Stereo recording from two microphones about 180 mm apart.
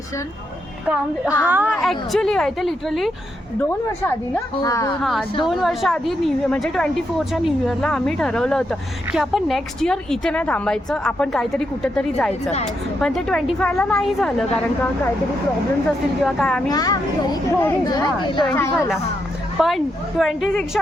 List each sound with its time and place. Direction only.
1.5 s speech: 10° right (ahead or behind)
3.6 s a woman's voice: 10° left (ahead or behind)
4.9 s speech: centre (ahead or behind)
16.2 s speech: centre (ahead or behind)
16.6 s a woman's voice: 20° left (ahead or behind)
19.5 s speech: centre (ahead or behind)